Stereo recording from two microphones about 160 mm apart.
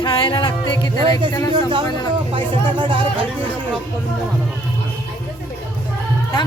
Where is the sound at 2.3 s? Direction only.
30° right (ahead or behind).